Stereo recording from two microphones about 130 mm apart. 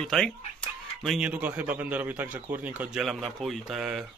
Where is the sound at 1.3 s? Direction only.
10° right (ahead or behind).